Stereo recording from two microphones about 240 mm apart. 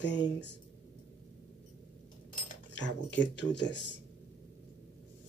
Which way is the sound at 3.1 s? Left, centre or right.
Left.